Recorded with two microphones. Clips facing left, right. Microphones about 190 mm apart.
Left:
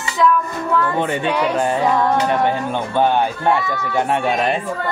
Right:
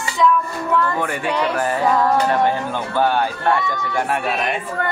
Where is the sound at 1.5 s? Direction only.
25° left (ahead or behind).